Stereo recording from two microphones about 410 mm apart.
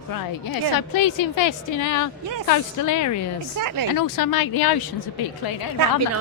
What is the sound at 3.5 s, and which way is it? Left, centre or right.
Speech, right.